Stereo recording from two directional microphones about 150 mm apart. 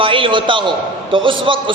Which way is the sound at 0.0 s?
35° right (ahead or behind).